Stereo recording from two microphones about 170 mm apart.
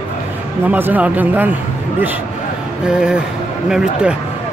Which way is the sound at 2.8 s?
5° right (ahead or behind).